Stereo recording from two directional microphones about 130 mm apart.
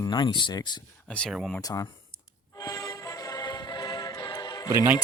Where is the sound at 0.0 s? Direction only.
35° left (ahead or behind).